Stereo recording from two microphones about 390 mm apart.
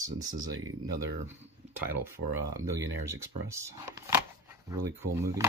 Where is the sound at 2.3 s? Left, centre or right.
Right.